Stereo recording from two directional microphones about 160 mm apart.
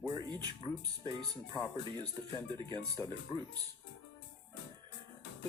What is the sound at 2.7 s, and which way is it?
Speech, 10° left (ahead or behind).